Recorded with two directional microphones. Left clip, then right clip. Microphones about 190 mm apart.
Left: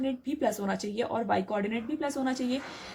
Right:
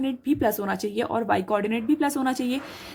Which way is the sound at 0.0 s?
40° right (ahead or behind).